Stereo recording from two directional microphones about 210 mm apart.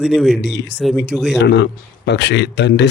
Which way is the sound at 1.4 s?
55° left (ahead or behind).